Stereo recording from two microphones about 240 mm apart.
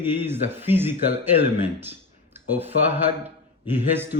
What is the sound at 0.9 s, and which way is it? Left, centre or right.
Speech, right.